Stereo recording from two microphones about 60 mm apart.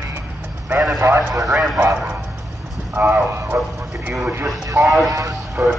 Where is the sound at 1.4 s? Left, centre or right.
Centre.